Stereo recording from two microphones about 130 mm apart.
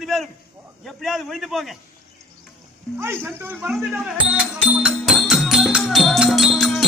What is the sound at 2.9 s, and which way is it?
Speech, 20° right (ahead or behind).